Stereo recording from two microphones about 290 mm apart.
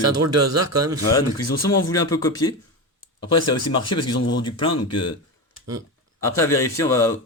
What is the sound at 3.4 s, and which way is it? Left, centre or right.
Speech, left.